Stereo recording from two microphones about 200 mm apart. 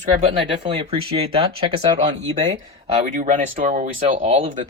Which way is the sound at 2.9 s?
40° right (ahead or behind).